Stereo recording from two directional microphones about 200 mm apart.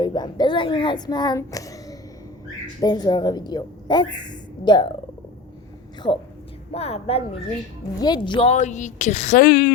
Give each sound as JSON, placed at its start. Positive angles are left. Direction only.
{"t": 0.0, "sound": "a child's voice", "side_deg": 20}
{"t": 6.7, "sound": "a woman's voice", "side_deg": 30}